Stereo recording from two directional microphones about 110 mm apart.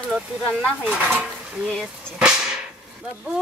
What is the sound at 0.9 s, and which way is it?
Speech, 10° right (ahead or behind).